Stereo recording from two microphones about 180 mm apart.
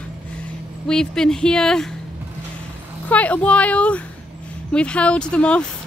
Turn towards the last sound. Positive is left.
turn(degrees=5)  # may be behind; listen again after turning